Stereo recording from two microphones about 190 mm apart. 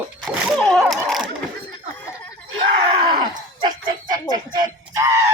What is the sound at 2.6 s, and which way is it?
Screaming, 25° right (ahead or behind).